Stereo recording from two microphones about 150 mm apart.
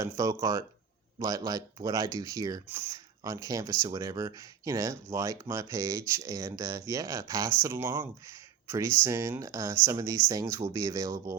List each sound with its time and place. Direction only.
0.0 s speech: 20° right (ahead or behind)
9.0 s speech: 20° right (ahead or behind)